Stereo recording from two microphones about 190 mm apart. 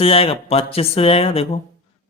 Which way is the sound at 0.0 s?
30° left (ahead or behind).